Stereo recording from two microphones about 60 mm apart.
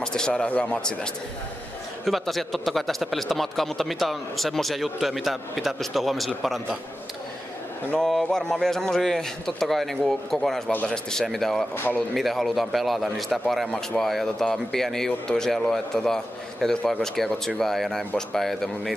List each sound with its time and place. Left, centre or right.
0.0 s a sound: centre
0.5 s speech: left
2.0 s speech: centre
8.0 s speech: centre